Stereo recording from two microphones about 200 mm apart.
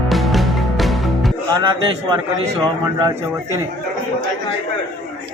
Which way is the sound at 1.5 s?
20° right (ahead or behind).